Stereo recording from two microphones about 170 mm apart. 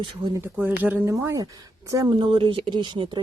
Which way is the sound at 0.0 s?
25° right (ahead or behind).